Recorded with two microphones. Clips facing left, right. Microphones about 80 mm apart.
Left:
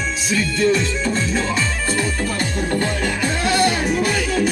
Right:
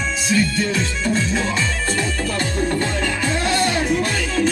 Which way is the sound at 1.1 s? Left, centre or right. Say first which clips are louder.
Right 2 dB; centre.